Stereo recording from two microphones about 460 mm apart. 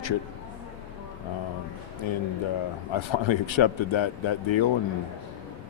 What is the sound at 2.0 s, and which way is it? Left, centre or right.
Speech, left.